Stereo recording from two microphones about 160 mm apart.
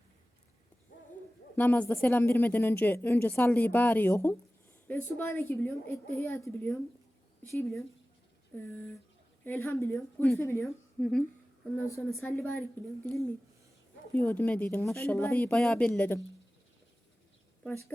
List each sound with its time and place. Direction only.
1.5 s speech: 10° left (ahead or behind)
10.6 s a woman's voice: centre (ahead or behind)
12.2 s speech: 10° left (ahead or behind)
14.2 s speech: 10° left (ahead or behind)
17.6 s a woman's voice: 10° left (ahead or behind)